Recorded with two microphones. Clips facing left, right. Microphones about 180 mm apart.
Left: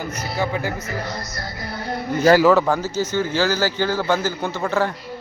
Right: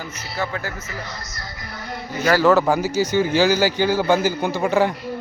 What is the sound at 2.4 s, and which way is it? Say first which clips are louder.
A man's voice: even; 5° right (ahead or behind).